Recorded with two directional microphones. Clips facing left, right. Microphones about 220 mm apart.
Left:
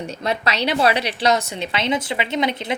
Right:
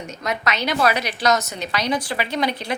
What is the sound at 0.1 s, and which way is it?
A woman's voice, 30° left (ahead or behind).